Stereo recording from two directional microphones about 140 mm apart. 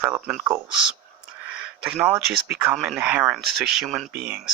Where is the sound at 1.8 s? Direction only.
10° right (ahead or behind).